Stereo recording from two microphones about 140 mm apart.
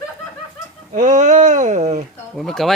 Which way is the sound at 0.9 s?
65° right (ahead or behind).